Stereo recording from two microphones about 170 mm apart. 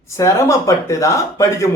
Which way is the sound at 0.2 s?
15° left (ahead or behind).